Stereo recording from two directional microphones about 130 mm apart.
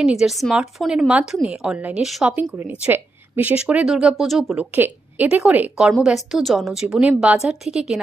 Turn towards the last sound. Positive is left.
turn(degrees=-5)  # may be behind; listen again after turning